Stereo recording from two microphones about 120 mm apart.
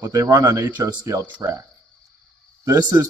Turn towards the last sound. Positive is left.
turn(degrees=-25)  # may be behind; listen again after turning